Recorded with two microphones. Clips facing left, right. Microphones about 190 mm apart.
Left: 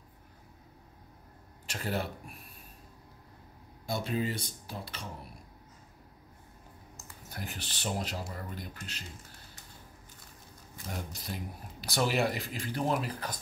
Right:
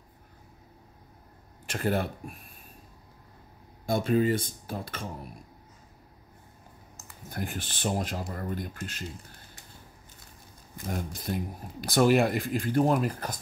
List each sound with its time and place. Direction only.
1.7 s speech: 50° right (ahead or behind)
3.8 s speech: 50° right (ahead or behind)
7.2 s speech: 50° right (ahead or behind)
10.9 s speech: 50° right (ahead or behind)